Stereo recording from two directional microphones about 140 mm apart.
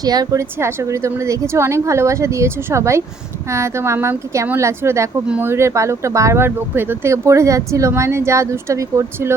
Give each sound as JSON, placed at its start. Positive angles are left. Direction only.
{"t": 0.0, "sound": "speech", "side_deg": -25}